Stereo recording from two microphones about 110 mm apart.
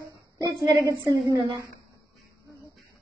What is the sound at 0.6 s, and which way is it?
Child singing, 40° right (ahead or behind).